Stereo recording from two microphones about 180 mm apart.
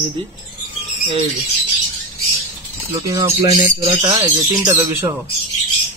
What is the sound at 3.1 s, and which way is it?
Speech, 20° right (ahead or behind).